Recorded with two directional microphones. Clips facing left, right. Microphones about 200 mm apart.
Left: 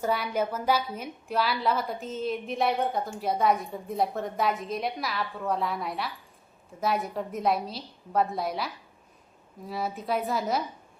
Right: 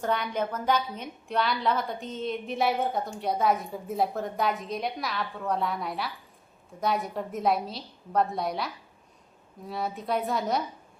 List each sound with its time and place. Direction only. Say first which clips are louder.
0.0 s a woman's voice: left 1 dB; 5° left (ahead or behind)